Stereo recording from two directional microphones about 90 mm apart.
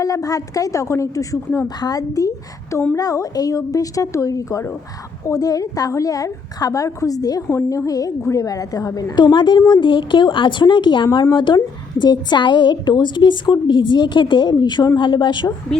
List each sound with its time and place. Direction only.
0.0 s a woman's voice: 40° left (ahead or behind)
9.1 s a woman's voice: 55° left (ahead or behind)
9.6 s a woman's voice: 45° left (ahead or behind)
9.8 s a woman's voice: 60° left (ahead or behind)